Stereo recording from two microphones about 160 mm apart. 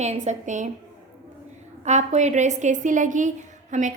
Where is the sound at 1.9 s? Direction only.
45° right (ahead or behind).